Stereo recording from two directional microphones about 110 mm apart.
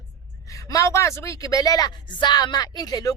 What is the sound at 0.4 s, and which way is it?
A woman's voice, 30° left (ahead or behind).